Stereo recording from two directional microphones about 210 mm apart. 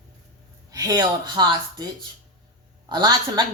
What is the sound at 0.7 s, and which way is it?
Speech, 15° right (ahead or behind).